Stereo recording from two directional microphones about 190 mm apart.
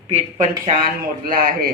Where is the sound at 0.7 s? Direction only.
45° right (ahead or behind).